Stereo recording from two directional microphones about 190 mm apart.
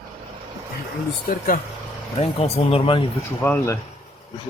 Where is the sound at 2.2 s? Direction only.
35° left (ahead or behind).